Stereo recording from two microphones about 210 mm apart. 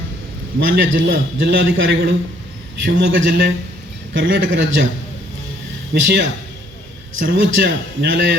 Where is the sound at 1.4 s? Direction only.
50° right (ahead or behind).